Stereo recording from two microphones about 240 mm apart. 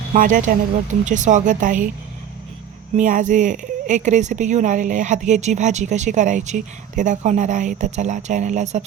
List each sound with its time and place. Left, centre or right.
0.1 s a woman's voice: right
3.0 s a woman's voice: right